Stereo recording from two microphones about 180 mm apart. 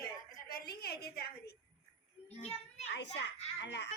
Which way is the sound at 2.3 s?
35° left (ahead or behind).